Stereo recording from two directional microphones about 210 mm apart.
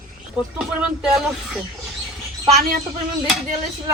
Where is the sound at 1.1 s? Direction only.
Centre (ahead or behind).